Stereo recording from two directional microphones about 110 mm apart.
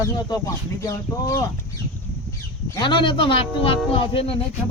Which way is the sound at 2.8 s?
50° left (ahead or behind).